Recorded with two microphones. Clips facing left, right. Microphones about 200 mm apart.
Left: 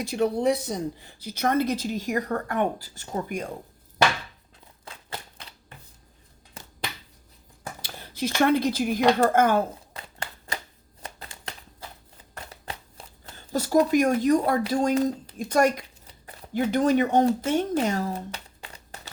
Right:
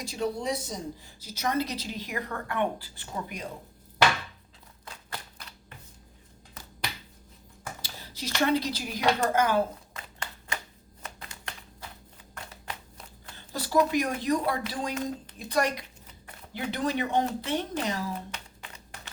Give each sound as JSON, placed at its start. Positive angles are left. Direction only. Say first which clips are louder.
{"t": 0.0, "sound": "a woman's voice", "louder": "left 7 dB", "side_deg": 60}
{"t": 5.1, "sound": "typewriter", "louder": "left 3 dB", "side_deg": 30}
{"t": 7.8, "sound": "a woman's voice", "louder": "left 10 dB", "side_deg": 55}
{"t": 9.9, "sound": "a sound", "louder": "left 3 dB", "side_deg": 30}
{"t": 12.3, "sound": "scissors", "louder": "left 2 dB", "side_deg": 35}
{"t": 13.5, "sound": "a woman's voice", "louder": "left 4 dB", "side_deg": 45}
{"t": 18.3, "sound": "a sound", "louder": "left 3 dB", "side_deg": 35}